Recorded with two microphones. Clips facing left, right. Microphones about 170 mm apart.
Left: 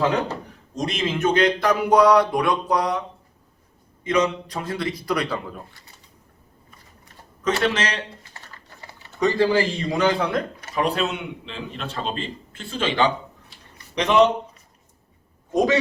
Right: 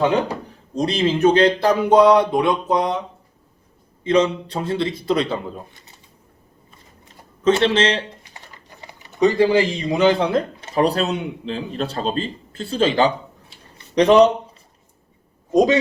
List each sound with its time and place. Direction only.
0.7 s speech: 30° right (ahead or behind)
4.0 s speech: 30° right (ahead or behind)
7.4 s speech: 25° right (ahead or behind)
8.2 s speech: 15° right (ahead or behind); by 13.1 s 35° right (ahead or behind)
13.7 s a sound: 35° right (ahead or behind)
15.5 s speech: 20° right (ahead or behind)